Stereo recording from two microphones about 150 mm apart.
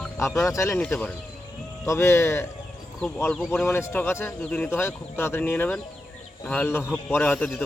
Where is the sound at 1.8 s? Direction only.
20° left (ahead or behind).